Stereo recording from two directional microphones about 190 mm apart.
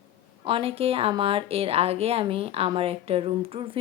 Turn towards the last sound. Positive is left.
turn(degrees=-30)  # may be behind; listen again after turning